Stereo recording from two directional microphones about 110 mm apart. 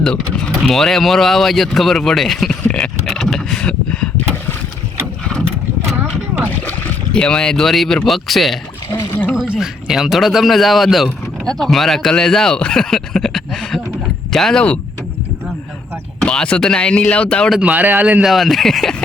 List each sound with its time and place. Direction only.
0.0 s speech: 5° left (ahead or behind)
2.6 s a sound: 10° left (ahead or behind)
3.1 s vehicle: 5° left (ahead or behind)
6.0 s vehicle: 20° right (ahead or behind)
6.7 s speech: 10° left (ahead or behind)
16.2 s speech: 10° left (ahead or behind)
17.5 s speech: 10° right (ahead or behind)
18.2 s speech: centre (ahead or behind)